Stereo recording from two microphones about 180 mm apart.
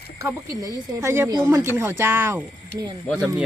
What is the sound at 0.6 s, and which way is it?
Speech, 15° right (ahead or behind).